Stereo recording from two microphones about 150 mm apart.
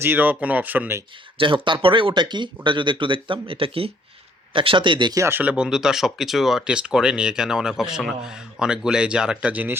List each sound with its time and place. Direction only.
0.0 s speech: 15° right (ahead or behind)
1.4 s speech: 35° right (ahead or behind)
5.2 s speech: 10° right (ahead or behind)